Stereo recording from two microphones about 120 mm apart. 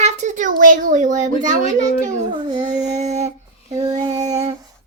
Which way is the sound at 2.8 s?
70° right (ahead or behind).